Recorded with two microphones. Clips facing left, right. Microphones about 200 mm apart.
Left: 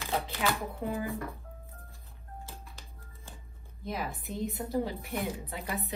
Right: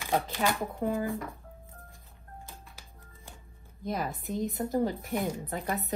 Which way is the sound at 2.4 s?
15° right (ahead or behind).